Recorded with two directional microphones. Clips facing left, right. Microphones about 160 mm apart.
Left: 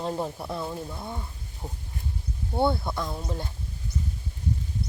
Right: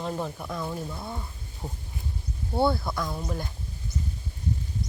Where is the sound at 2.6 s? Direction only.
25° left (ahead or behind).